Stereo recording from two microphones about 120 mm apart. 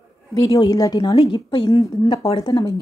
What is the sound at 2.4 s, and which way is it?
Speech, 35° left (ahead or behind).